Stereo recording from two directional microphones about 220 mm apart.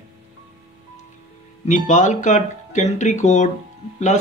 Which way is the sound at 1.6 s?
35° left (ahead or behind).